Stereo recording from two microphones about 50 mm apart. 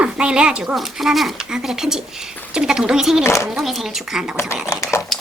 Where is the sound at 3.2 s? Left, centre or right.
Left.